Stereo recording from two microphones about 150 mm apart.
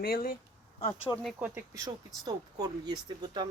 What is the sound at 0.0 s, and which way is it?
Speech, 75° left (ahead or behind).